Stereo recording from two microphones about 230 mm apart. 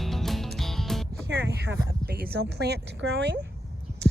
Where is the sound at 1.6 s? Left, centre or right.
Right.